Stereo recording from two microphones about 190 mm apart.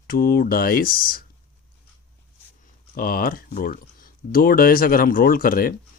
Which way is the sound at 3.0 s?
50° left (ahead or behind).